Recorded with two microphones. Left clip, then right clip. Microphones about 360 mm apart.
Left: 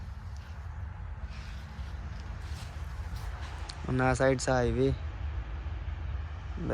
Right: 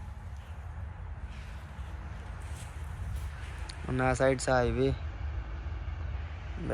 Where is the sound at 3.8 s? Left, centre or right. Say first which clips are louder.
Left 1 dB; centre.